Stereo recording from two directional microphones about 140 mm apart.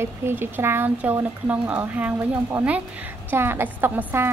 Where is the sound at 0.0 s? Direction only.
15° right (ahead or behind).